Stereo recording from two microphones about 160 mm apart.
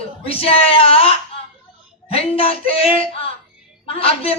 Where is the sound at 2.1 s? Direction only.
35° left (ahead or behind).